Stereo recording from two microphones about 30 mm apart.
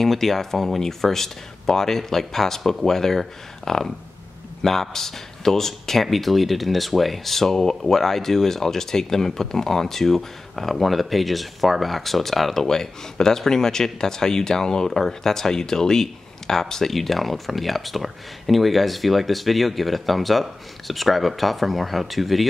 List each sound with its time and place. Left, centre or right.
0.0 s speech: centre
12.6 s speech: centre
16.9 s speech: centre